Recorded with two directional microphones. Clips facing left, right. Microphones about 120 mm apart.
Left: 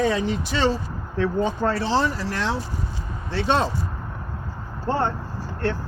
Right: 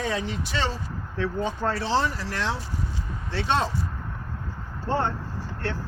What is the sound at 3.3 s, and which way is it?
Speech, 45° left (ahead or behind).